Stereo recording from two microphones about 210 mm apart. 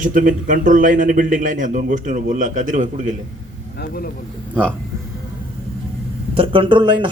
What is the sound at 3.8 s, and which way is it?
Speech, 45° left (ahead or behind).